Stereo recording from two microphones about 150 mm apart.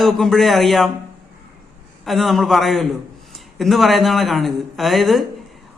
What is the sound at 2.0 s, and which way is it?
Speech, centre (ahead or behind).